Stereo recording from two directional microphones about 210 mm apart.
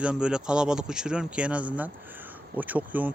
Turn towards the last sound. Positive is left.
turn(degrees=-10)  # may be behind; listen again after turning